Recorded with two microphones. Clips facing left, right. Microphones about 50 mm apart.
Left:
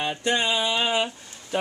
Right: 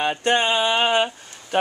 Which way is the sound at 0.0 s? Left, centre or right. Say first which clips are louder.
Right 4 dB; right.